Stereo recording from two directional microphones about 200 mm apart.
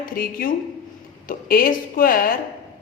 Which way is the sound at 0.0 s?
45° left (ahead or behind).